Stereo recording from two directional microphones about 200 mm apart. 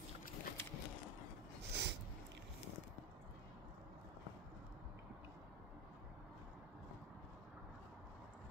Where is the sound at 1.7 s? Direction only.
60° right (ahead or behind).